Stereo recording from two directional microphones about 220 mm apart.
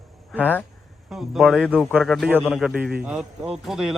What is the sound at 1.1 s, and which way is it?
A man's voice, centre (ahead or behind).